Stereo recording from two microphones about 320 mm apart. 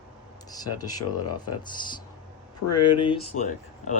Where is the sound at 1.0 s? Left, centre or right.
Left.